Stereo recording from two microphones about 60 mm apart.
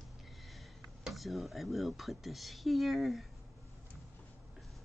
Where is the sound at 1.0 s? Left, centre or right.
Centre.